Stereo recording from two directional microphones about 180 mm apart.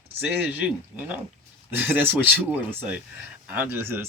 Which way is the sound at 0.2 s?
10° right (ahead or behind).